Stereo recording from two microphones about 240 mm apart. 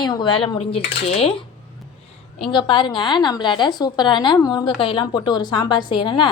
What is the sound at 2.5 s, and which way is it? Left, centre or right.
A woman's voice, centre.